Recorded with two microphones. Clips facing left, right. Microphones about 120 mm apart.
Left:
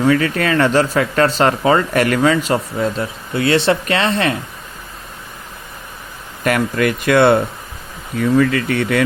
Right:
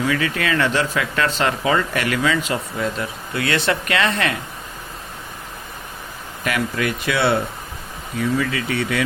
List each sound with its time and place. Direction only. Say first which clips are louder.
0.0 s speech: left 6 dB; 40° left (ahead or behind)
6.4 s speech: left 6 dB; 50° left (ahead or behind)